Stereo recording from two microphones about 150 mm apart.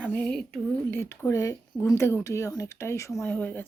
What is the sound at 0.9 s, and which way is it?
Speech, 15° left (ahead or behind).